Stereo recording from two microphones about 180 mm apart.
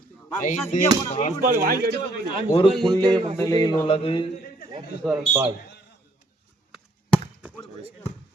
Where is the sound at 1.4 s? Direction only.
55° right (ahead or behind).